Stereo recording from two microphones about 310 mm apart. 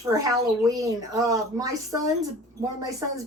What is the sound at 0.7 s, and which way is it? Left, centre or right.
Speech, centre.